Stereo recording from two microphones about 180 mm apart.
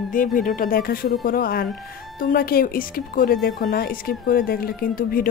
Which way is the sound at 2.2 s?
55° left (ahead or behind).